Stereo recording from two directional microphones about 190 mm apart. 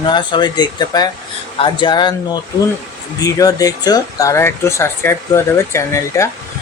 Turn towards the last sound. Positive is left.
turn(degrees=15)  # may be behind; listen again after turning